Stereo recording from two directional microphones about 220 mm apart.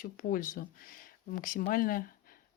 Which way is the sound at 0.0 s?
40° left (ahead or behind).